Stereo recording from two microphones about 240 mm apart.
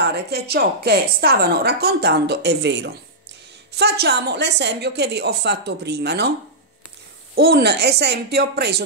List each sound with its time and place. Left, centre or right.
0.1 s a woman's voice: right
7.3 s a woman's voice: right